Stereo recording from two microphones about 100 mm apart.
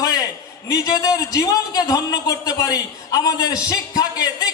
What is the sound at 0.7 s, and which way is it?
Speech, 40° left (ahead or behind).